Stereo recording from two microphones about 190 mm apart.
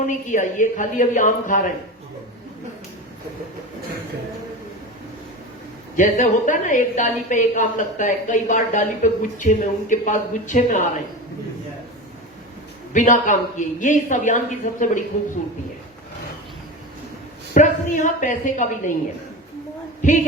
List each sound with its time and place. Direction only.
0.0 s speech: 40° left (ahead or behind)
6.0 s a woman's voice: 40° left (ahead or behind)
12.9 s a woman's voice: 40° left (ahead or behind)
17.5 s a woman's voice: 40° left (ahead or behind)
20.0 s a woman's voice: 40° left (ahead or behind)